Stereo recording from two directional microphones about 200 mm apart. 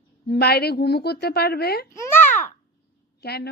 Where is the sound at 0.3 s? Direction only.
55° left (ahead or behind).